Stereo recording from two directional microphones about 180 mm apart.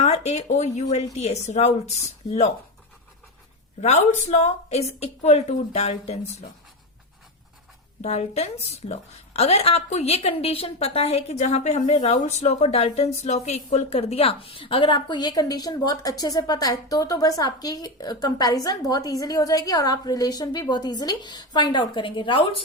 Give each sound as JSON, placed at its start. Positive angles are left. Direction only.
{"t": 0.0, "sound": "a woman's voice", "side_deg": 35}
{"t": 3.8, "sound": "a woman's voice", "side_deg": 40}
{"t": 8.0, "sound": "a woman's voice", "side_deg": 35}